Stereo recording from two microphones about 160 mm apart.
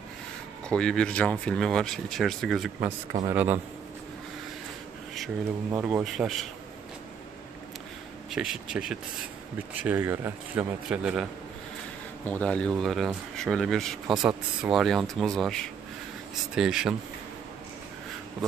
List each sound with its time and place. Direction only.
0.7 s speech: 5° left (ahead or behind)
3.3 s speech: 15° right (ahead or behind)
5.7 s speech: 10° right (ahead or behind)
6.0 s speech: centre (ahead or behind)
8.3 s speech: 5° right (ahead or behind)
12.3 s speech: 5° left (ahead or behind)